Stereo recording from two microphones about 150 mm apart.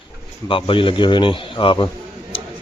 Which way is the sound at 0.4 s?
35° left (ahead or behind).